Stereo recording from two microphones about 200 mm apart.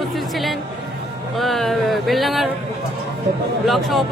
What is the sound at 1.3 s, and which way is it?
Speech, centre (ahead or behind).